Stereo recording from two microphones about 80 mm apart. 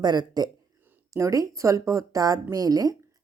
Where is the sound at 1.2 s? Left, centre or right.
Right.